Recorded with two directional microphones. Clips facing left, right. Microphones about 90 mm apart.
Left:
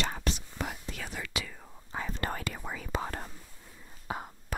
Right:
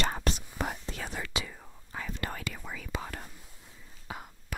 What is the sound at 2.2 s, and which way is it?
Whispering, 40° left (ahead or behind).